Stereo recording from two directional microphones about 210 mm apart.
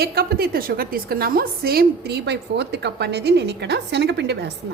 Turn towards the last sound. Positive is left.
turn(degrees=-55)  # may be behind; listen again after turning